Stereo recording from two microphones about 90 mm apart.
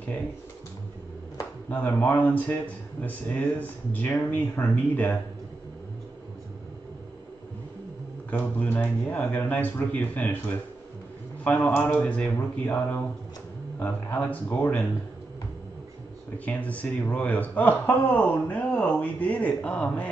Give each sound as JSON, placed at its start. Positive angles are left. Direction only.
{"t": 1.7, "sound": "speech", "side_deg": 20}
{"t": 8.3, "sound": "speech", "side_deg": 20}
{"t": 11.7, "sound": "speech", "side_deg": 15}
{"t": 16.4, "sound": "speech", "side_deg": 15}